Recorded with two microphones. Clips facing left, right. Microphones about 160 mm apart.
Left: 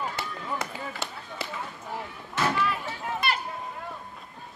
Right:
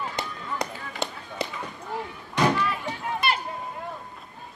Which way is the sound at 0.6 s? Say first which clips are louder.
Right 3 dB; 15° right (ahead or behind).